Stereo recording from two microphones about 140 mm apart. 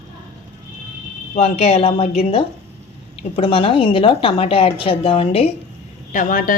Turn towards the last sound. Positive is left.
turn(degrees=80)